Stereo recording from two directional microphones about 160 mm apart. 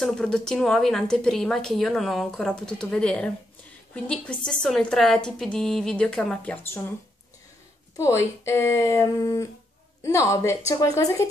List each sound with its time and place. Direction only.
0.0 s speech: 5° left (ahead or behind); by 11.2 s 20° left (ahead or behind)